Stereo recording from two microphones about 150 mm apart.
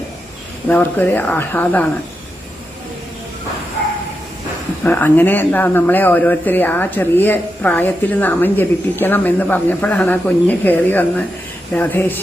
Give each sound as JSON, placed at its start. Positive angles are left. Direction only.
{"t": 0.7, "sound": "speech", "side_deg": 10}
{"t": 4.8, "sound": "speech", "side_deg": 10}